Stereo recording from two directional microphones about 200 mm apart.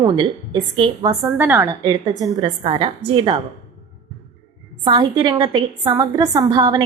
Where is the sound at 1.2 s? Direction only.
10° right (ahead or behind); by 3.3 s 25° right (ahead or behind).